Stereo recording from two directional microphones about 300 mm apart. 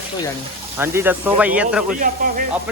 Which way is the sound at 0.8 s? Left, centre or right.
Centre.